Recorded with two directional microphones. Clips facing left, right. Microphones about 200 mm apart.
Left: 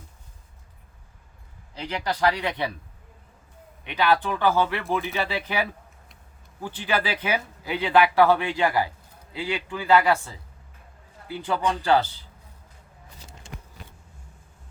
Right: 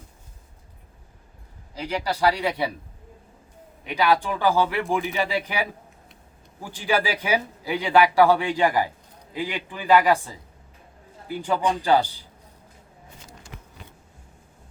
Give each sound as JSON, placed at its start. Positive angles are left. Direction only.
{"t": 1.7, "sound": "speech", "side_deg": -10}
{"t": 3.8, "sound": "speech", "side_deg": -10}